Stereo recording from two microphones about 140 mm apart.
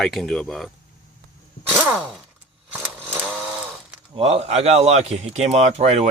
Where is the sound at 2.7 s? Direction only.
15° right (ahead or behind).